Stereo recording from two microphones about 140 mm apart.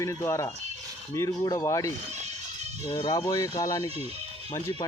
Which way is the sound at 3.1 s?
25° left (ahead or behind).